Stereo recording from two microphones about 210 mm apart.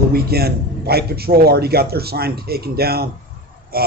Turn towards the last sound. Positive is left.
turn(degrees=-45)  # may be behind; listen again after turning